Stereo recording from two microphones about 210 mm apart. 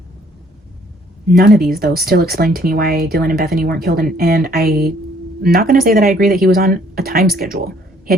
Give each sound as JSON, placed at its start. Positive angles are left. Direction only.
{"t": 1.3, "sound": "speech", "side_deg": -45}